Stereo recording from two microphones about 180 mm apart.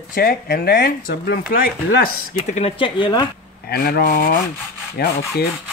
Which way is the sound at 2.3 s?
35° left (ahead or behind).